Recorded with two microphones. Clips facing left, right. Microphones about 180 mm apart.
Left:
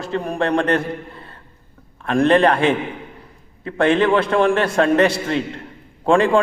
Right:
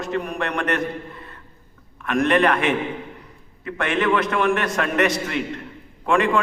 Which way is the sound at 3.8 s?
30° left (ahead or behind).